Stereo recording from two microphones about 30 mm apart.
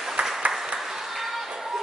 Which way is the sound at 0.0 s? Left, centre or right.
Centre.